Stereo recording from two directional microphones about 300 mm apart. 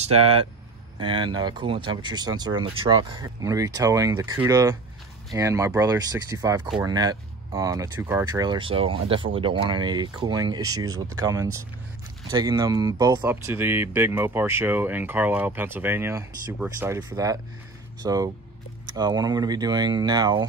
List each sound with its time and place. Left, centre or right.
0.0 s speech: centre